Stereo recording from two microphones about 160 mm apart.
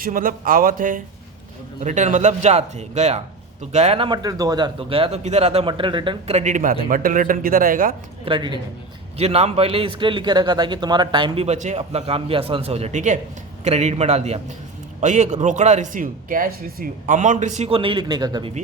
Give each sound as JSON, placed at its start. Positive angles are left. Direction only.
{"t": 0.0, "sound": "a man's voice", "side_deg": -60}
{"t": 8.2, "sound": "speech", "side_deg": -30}
{"t": 9.1, "sound": "a man's voice", "side_deg": -40}
{"t": 11.4, "sound": "a man's voice", "side_deg": -45}
{"t": 17.7, "sound": "a man's voice", "side_deg": -30}